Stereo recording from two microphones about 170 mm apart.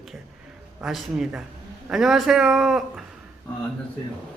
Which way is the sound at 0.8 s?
Centre (ahead or behind).